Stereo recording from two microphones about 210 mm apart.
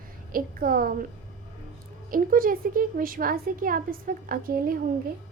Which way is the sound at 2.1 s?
40° right (ahead or behind).